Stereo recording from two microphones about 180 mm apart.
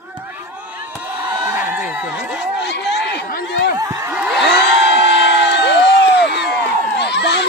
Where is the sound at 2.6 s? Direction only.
70° left (ahead or behind).